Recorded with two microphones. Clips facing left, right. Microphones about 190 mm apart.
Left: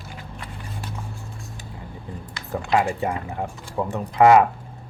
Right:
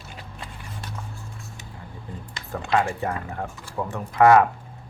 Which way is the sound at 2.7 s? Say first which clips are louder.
Left 2 dB; 15° left (ahead or behind).